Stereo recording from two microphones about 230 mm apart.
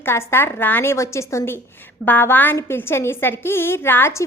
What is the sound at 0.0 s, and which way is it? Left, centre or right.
A woman's voice, centre.